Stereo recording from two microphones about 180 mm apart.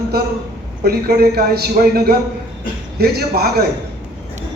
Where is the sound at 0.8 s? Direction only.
60° right (ahead or behind).